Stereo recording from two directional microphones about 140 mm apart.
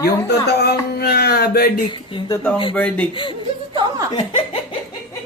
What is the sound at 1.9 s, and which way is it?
Speech, 35° left (ahead or behind).